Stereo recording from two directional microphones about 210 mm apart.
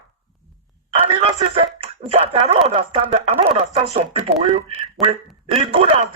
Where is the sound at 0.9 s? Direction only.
25° right (ahead or behind).